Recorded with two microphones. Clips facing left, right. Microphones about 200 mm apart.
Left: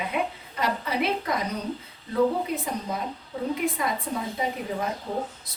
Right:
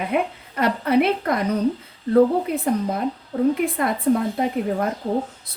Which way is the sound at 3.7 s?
60° right (ahead or behind).